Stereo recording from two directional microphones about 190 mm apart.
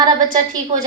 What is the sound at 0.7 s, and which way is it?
Speech, 35° right (ahead or behind).